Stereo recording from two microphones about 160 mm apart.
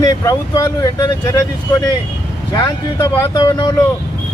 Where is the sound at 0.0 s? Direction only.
25° left (ahead or behind).